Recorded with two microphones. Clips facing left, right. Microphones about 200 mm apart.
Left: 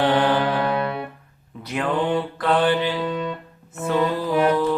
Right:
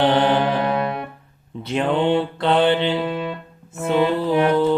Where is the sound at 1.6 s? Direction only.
25° right (ahead or behind).